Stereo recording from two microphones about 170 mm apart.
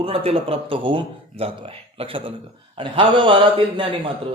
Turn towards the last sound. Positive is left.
turn(degrees=-30)  # may be behind; listen again after turning